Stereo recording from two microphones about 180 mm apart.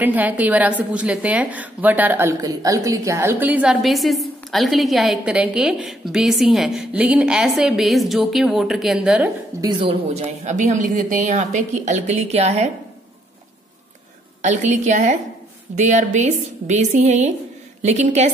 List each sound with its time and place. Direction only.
0.0 s a woman's voice: 10° right (ahead or behind)
9.6 s a woman's voice: 25° right (ahead or behind)
14.4 s a woman's voice: 40° right (ahead or behind)